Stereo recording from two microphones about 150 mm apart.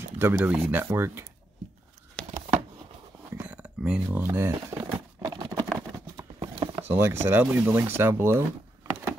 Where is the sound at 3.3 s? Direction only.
10° right (ahead or behind).